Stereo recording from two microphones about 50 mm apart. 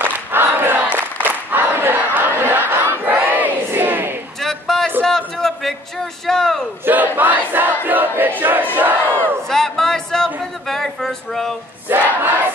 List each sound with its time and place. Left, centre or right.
0.0 s battle cry: right
4.4 s a sound: centre
6.2 s a man's voice: centre
6.9 s battle cry: right
9.5 s a sound: centre
11.9 s battle cry: right